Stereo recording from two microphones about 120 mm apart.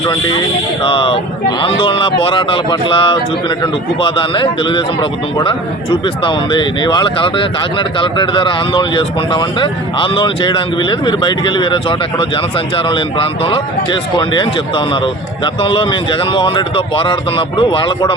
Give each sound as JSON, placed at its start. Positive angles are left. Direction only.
{"t": 0.9, "sound": "a man's voice", "side_deg": 45}